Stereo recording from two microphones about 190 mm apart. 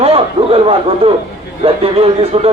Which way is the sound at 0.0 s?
30° right (ahead or behind).